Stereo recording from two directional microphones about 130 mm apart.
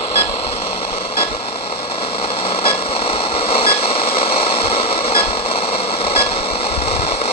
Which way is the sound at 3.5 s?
50° left (ahead or behind).